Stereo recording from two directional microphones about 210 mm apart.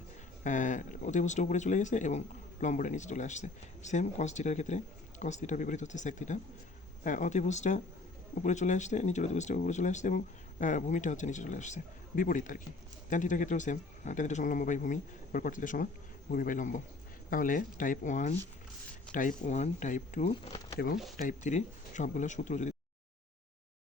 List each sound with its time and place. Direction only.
0.4 s speech: 35° left (ahead or behind)
20.7 s speech: 45° left (ahead or behind)